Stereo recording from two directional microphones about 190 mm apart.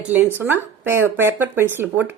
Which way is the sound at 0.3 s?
10° right (ahead or behind).